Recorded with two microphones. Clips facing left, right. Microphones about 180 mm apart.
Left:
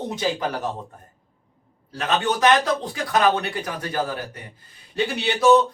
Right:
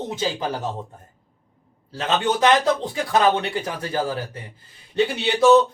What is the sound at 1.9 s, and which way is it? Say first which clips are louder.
Speech: right 1 dB; 25° right (ahead or behind).